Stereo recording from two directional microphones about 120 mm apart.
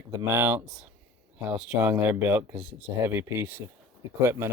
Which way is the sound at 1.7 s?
15° right (ahead or behind).